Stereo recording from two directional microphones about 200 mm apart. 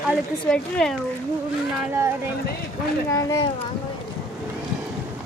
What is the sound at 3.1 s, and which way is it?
Speech, 15° left (ahead or behind).